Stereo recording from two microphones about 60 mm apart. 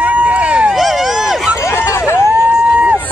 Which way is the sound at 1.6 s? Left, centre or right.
Left.